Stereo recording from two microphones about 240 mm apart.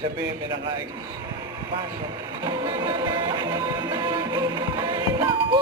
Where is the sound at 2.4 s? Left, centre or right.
Centre.